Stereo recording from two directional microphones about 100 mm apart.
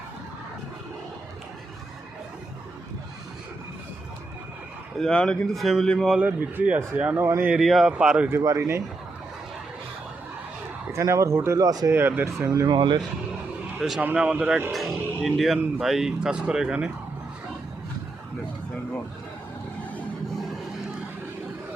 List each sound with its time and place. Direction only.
4.9 s speech: 5° left (ahead or behind)
6.1 s speech: 15° right (ahead or behind)
7.6 s speech: 5° right (ahead or behind)
8.3 s speech: 25° right (ahead or behind)
10.9 s speech: 30° right (ahead or behind)
11.9 s speech: 20° right (ahead or behind)
12.6 s speech: 50° right (ahead or behind)
13.7 s speech: centre (ahead or behind)
14.0 s speech: 15° right (ahead or behind)